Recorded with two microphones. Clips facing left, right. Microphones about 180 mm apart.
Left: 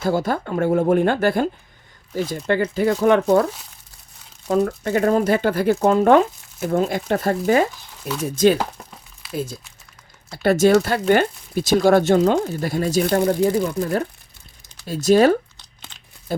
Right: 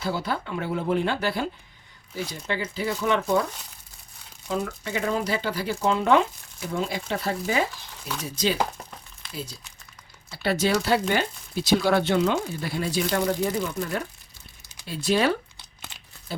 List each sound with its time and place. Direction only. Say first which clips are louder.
0.0 s speech: left 7 dB; 45° left (ahead or behind)
4.4 s speech: left 9 dB; 45° left (ahead or behind)
13.4 s speech: left 7 dB; 30° left (ahead or behind)